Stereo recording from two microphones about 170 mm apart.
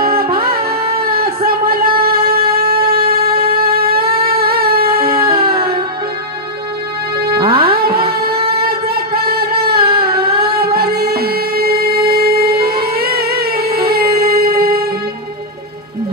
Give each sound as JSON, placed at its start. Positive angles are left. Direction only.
{"t": 0.0, "sound": "music", "side_deg": -60}
{"t": 1.1, "sound": "a sound", "side_deg": -60}
{"t": 7.3, "sound": "music", "side_deg": -30}
{"t": 7.6, "sound": "music", "side_deg": -65}
{"t": 8.4, "sound": "singing", "side_deg": -35}
{"t": 8.6, "sound": "a sound", "side_deg": -65}
{"t": 10.4, "sound": "music", "side_deg": -65}